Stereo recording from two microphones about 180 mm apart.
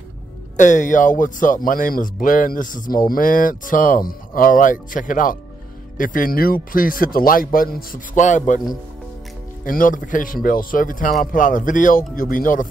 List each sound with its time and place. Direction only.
0.6 s speech: 45° left (ahead or behind)
9.7 s speech: 50° left (ahead or behind)